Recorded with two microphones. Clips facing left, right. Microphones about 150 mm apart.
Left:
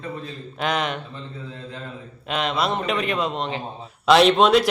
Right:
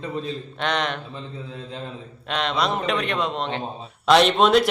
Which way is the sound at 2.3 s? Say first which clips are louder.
Even; 5° left (ahead or behind).